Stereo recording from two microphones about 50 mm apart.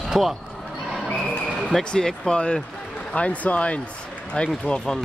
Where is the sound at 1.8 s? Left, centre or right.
Centre.